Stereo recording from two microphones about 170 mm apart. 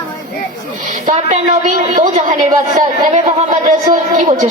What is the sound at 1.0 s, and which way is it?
A woman's voice, 45° right (ahead or behind).